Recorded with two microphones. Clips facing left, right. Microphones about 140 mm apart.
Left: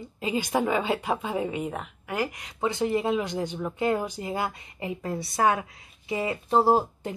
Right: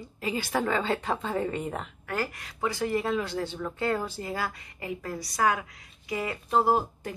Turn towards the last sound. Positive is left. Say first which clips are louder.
# left 3 dB
turn(degrees=25)  # may be behind; listen again after turning